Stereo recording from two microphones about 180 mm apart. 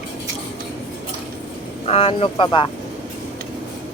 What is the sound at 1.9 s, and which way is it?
Speech, 30° left (ahead or behind).